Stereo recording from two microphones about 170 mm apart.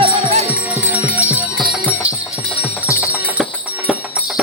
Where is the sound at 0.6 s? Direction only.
10° right (ahead or behind).